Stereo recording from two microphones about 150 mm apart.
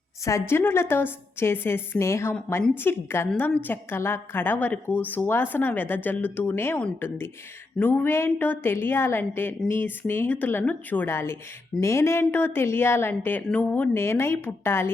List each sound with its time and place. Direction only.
0.3 s a woman's voice: 20° left (ahead or behind)